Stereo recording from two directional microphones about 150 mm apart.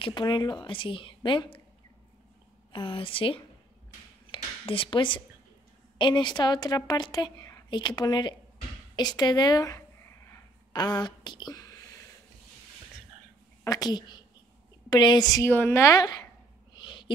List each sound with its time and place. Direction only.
0.0 s a woman's voice: 30° left (ahead or behind)
2.7 s a woman's voice: 35° left (ahead or behind)
4.3 s a sound: 35° left (ahead or behind)
5.9 s a woman's voice: 30° left (ahead or behind)
8.9 s a sound: 30° left (ahead or behind)
13.7 s a woman's voice: 25° left (ahead or behind)
16.7 s owl: 30° left (ahead or behind)